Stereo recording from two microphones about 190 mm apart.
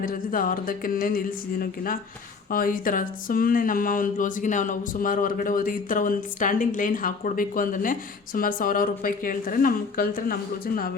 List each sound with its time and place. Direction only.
0.0 s speech: 45° left (ahead or behind)